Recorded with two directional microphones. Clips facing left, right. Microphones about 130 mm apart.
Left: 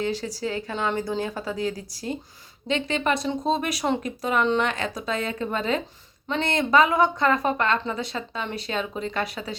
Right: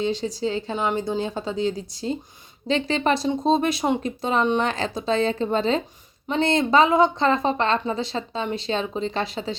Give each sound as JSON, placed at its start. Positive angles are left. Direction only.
{"t": 0.0, "sound": "a woman's voice", "side_deg": -20}